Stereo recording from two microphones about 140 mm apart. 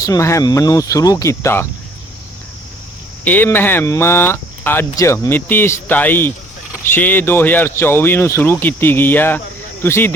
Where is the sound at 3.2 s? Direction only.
15° left (ahead or behind).